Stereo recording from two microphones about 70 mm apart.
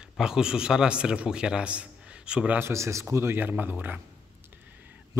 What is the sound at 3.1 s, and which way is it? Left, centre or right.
Speech, right.